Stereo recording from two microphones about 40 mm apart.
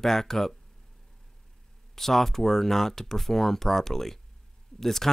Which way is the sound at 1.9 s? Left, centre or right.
Centre.